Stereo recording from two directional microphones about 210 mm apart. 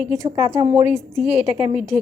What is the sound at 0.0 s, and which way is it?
A woman's voice, 15° right (ahead or behind).